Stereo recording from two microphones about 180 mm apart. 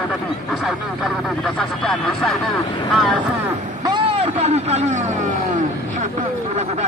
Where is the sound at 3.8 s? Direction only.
25° right (ahead or behind).